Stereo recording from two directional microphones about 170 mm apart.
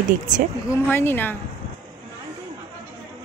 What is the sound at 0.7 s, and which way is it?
Speech, 15° left (ahead or behind).